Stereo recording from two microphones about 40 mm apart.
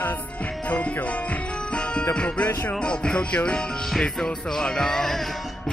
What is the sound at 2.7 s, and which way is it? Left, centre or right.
Music, left.